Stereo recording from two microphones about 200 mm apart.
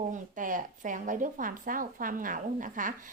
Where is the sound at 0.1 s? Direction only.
40° right (ahead or behind).